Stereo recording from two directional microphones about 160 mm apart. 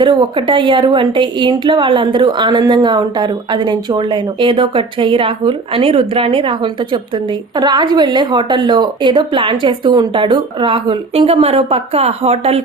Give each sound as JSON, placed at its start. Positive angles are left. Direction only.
{"t": 0.0, "sound": "a woman's voice", "side_deg": -30}